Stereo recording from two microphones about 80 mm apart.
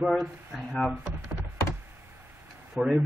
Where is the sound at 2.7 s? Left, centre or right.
Centre.